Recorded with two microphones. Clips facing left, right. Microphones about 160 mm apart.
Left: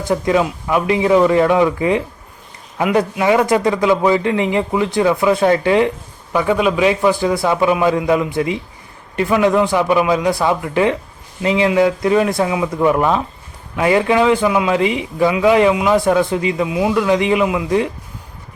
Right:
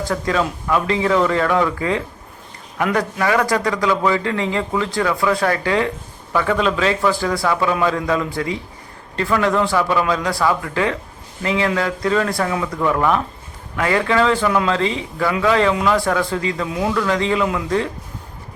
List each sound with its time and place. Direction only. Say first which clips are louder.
0.1 s a man's voice: left 6 dB; 20° left (ahead or behind)
16.6 s a man's voice: left 4 dB; 5° left (ahead or behind)
17.0 s a man's voice: left 4 dB; 15° left (ahead or behind)